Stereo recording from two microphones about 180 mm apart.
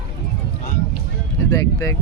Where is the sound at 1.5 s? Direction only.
15° left (ahead or behind).